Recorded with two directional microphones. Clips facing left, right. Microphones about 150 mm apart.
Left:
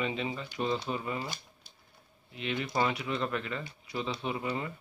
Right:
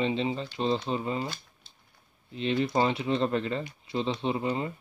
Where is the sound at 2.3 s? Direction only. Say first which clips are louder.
Right 6 dB; 30° right (ahead or behind).